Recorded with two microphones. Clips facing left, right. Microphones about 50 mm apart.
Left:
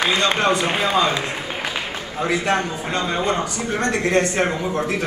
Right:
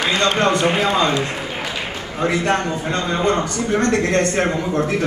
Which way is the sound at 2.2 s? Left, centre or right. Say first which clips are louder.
Right 2 dB; centre.